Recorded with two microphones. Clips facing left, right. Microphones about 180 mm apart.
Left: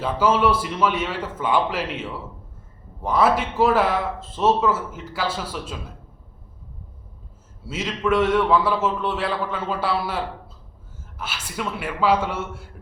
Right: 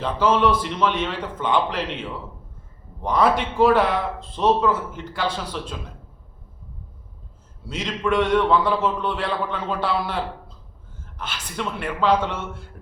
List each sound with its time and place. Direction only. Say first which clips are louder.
0.0 s a man's voice: even; 10° left (ahead or behind)
7.7 s a man's voice: left 1 dB; 5° left (ahead or behind)
11.2 s a man's voice: even; 5° left (ahead or behind)